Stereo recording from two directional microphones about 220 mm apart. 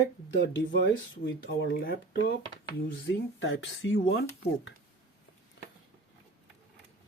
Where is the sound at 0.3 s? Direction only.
55° left (ahead or behind).